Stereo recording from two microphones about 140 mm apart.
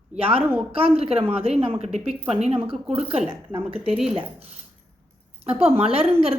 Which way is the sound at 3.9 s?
5° right (ahead or behind).